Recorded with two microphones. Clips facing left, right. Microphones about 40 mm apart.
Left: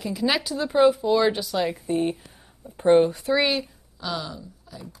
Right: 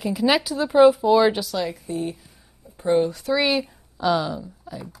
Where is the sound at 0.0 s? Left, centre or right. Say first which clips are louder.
Right 4 dB; centre.